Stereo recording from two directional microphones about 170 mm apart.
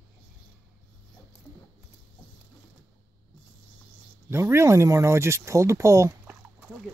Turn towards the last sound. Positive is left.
turn(degrees=-20)  # may be behind; listen again after turning